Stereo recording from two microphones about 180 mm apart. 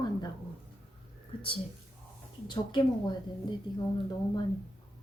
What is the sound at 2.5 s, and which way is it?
A woman's voice, 25° left (ahead or behind).